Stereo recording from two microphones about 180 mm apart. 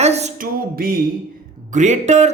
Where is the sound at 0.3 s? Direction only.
55° right (ahead or behind).